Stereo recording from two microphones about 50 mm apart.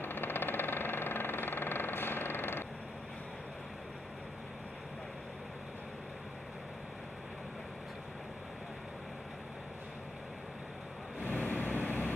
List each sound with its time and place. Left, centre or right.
0.0 s engine: left
11.2 s vehicle: left